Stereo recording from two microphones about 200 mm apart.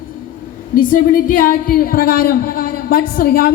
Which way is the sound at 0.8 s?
45° left (ahead or behind).